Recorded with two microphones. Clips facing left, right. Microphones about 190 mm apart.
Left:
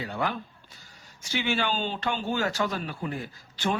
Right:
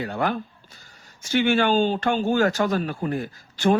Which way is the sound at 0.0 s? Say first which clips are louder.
Right 5 dB; 55° right (ahead or behind).